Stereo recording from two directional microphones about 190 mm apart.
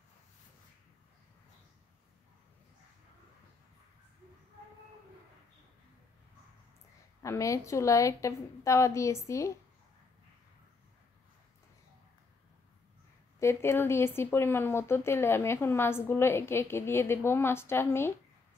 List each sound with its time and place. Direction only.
7.2 s speech: 15° left (ahead or behind)
13.4 s speech: 15° left (ahead or behind)